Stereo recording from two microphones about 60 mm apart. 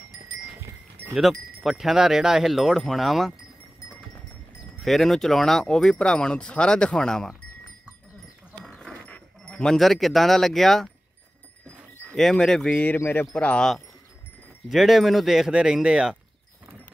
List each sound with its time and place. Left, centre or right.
1.1 s speech: centre
4.7 s speech: centre
8.6 s goat: centre
9.4 s sheep: centre
9.8 s speech: centre
12.2 s speech: centre
12.7 s speech: left
13.6 s speech: centre